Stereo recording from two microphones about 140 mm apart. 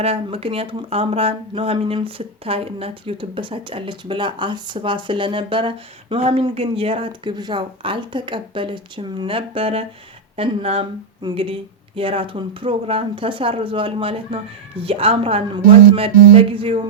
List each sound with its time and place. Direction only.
0.0 s speech: 45° right (ahead or behind)